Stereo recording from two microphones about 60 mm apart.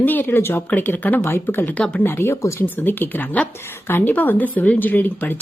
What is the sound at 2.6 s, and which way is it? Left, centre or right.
A woman's voice, left.